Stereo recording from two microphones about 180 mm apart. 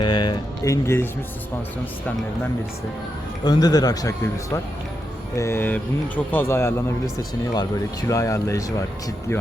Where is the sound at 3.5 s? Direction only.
20° left (ahead or behind).